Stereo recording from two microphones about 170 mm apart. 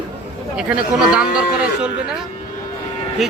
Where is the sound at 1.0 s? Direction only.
5° right (ahead or behind).